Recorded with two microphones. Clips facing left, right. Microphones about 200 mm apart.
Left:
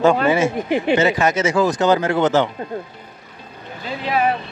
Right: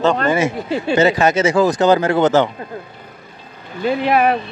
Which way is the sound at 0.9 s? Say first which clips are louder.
Right 5 dB; 35° right (ahead or behind).